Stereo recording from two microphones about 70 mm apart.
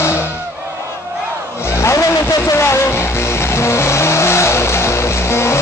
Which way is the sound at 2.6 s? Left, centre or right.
Left.